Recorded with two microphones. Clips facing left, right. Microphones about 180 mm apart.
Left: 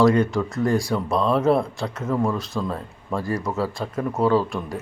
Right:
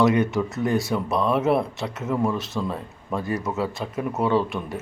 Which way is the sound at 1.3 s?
20° right (ahead or behind).